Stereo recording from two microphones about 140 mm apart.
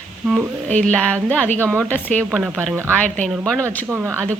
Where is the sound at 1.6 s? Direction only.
20° right (ahead or behind).